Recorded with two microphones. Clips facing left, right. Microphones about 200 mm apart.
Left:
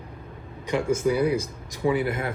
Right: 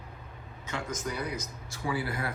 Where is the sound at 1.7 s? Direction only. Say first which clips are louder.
Left 9 dB; 20° left (ahead or behind).